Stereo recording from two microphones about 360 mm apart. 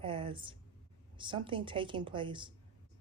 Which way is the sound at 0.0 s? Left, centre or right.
Centre.